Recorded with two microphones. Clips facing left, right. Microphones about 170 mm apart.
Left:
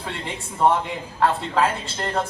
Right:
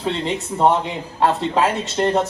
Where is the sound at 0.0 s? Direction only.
20° right (ahead or behind).